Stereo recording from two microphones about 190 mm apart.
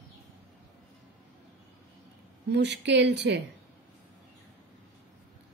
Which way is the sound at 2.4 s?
60° right (ahead or behind).